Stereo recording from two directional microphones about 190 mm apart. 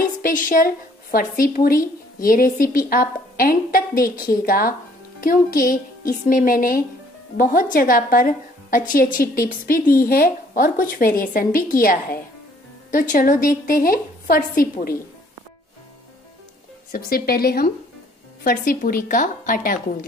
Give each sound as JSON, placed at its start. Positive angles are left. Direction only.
{"t": 0.2, "sound": "a woman's voice", "side_deg": 45}
{"t": 16.9, "sound": "a woman's voice", "side_deg": 50}